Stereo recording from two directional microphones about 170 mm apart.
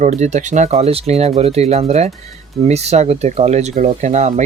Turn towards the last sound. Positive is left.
turn(degrees=-45)  # may be behind; listen again after turning